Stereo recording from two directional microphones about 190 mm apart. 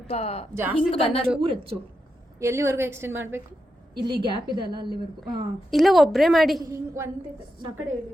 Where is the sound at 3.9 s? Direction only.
25° right (ahead or behind).